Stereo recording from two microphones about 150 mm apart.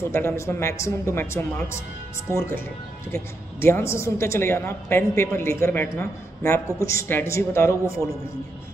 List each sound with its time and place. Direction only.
0.1 s a woman's voice: 15° left (ahead or behind)
3.6 s a woman's voice: 15° left (ahead or behind)